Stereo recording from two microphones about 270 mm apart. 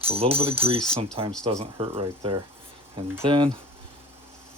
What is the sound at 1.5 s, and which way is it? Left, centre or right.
Speech, right.